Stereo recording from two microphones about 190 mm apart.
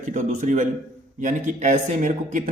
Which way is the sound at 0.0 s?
40° right (ahead or behind).